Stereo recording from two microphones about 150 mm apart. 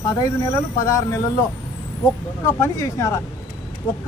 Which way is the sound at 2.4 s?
20° left (ahead or behind).